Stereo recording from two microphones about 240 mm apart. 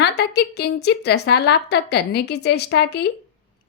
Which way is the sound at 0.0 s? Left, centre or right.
Left.